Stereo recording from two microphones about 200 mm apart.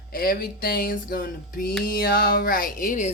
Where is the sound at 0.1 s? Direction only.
50° left (ahead or behind).